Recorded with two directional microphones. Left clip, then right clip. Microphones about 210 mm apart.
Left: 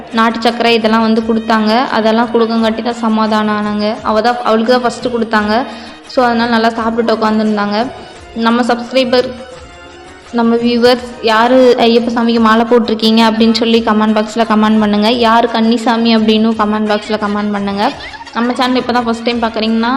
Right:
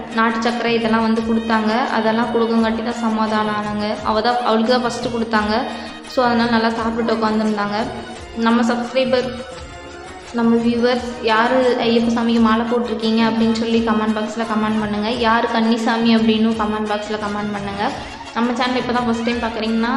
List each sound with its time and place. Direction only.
0.2 s a woman's voice: 45° left (ahead or behind)
10.3 s a woman's voice: 45° left (ahead or behind)